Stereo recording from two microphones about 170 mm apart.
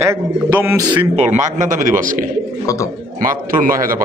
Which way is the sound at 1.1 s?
40° right (ahead or behind).